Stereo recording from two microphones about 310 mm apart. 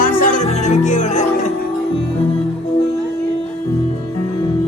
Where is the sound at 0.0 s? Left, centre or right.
Left.